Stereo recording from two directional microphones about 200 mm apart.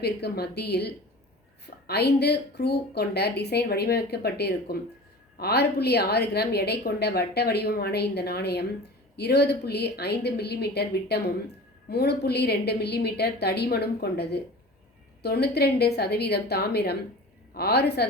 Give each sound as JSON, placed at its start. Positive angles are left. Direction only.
{"t": 0.0, "sound": "a woman's voice", "side_deg": 55}